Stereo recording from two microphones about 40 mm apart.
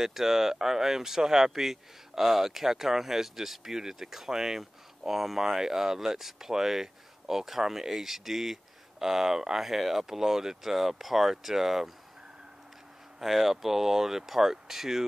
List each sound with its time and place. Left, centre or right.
0.0 s speech: centre
13.2 s speech: centre